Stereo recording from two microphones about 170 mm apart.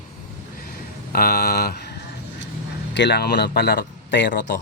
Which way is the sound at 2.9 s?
85° left.